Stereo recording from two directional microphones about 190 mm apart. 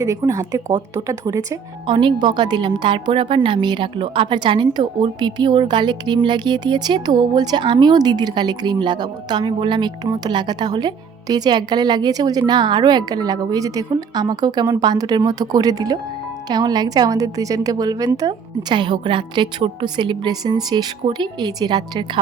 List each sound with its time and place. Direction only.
0.0 s speech: 15° right (ahead or behind)